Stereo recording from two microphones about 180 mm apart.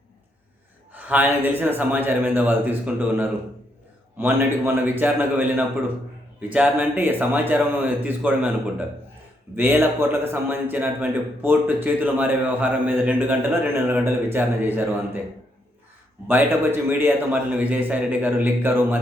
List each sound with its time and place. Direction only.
0.9 s a man's voice: 10° right (ahead or behind)
9.6 s a man's voice: 10° right (ahead or behind)
16.2 s a man's voice: 10° right (ahead or behind)